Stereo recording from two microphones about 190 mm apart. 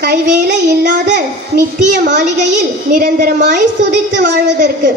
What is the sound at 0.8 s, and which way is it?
Speech, 60° right (ahead or behind).